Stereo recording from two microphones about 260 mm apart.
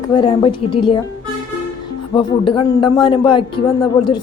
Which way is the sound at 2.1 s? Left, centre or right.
Centre.